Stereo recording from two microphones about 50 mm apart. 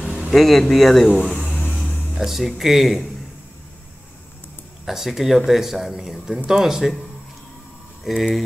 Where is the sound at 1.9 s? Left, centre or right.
Left.